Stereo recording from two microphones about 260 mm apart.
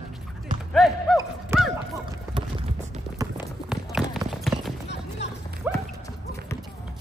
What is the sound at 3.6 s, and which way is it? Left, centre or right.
Run, centre.